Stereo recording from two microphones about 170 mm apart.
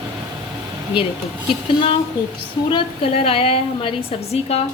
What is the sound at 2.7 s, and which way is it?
A woman's voice, 30° left (ahead or behind).